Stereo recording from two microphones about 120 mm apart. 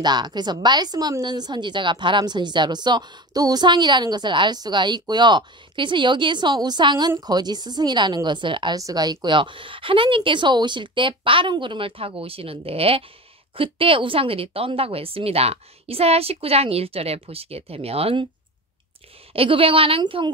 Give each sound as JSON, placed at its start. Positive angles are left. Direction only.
{"t": 0.0, "sound": "a woman's voice", "side_deg": -35}
{"t": 8.7, "sound": "a woman's voice", "side_deg": -30}
{"t": 19.3, "sound": "speech", "side_deg": -50}